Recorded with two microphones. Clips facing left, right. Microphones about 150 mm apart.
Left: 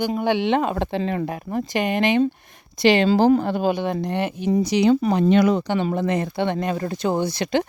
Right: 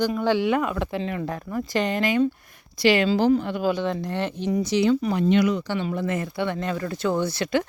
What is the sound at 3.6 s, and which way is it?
Speech, 15° left (ahead or behind).